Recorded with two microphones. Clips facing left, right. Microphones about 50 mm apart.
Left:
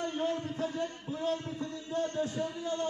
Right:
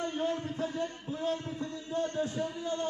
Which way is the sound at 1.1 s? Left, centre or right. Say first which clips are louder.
Even; right.